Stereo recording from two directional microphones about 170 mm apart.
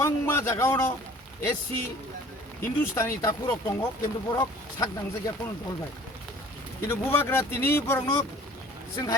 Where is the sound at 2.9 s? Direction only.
15° left (ahead or behind).